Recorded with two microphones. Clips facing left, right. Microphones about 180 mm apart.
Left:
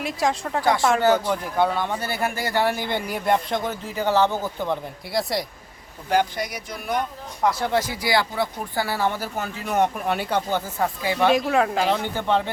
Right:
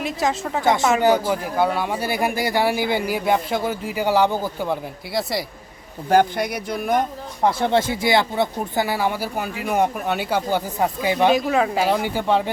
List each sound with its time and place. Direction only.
0.0 s a woman's voice: centre (ahead or behind)
0.6 s speech: 20° right (ahead or behind)
0.9 s speech: 10° right (ahead or behind)
6.1 s speech: 55° right (ahead or behind)
7.4 s speech: 25° right (ahead or behind); by 10.6 s 5° right (ahead or behind)
10.8 s speech: 15° right (ahead or behind)
11.3 s speech: centre (ahead or behind)